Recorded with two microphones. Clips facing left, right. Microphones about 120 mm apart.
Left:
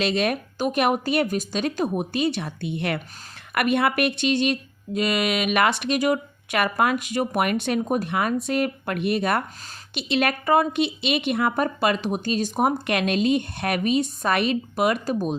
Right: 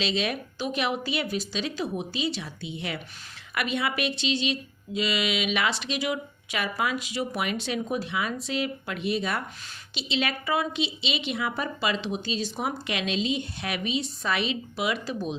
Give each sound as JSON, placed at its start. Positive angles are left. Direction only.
{"t": 0.0, "sound": "speech", "side_deg": 55}